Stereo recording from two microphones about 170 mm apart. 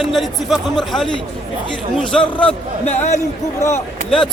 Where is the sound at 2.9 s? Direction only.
45° left (ahead or behind).